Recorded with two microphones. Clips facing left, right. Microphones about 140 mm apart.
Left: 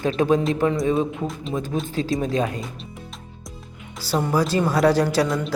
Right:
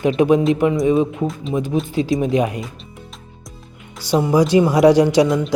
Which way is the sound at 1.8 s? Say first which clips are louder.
Right 5 dB; 15° right (ahead or behind).